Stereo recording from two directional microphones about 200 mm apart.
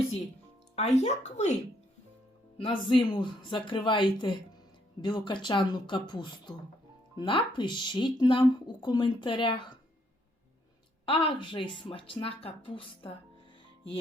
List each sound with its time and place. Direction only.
0.8 s speech: 35° left (ahead or behind)
2.6 s speech: 25° left (ahead or behind)
11.0 s speech: 25° left (ahead or behind)